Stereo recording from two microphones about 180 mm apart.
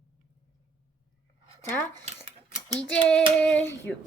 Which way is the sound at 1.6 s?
15° left (ahead or behind).